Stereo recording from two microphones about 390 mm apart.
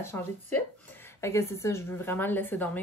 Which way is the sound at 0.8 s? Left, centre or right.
Centre.